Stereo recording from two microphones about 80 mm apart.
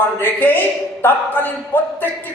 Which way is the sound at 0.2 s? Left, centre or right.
Left.